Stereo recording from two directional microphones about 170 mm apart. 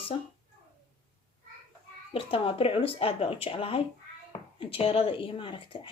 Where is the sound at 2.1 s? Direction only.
30° left (ahead or behind).